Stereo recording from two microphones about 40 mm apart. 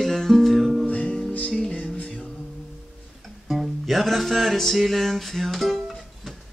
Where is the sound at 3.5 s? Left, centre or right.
Centre.